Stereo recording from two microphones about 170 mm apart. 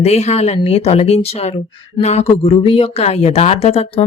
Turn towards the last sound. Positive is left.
turn(degrees=35)  # may be behind; listen again after turning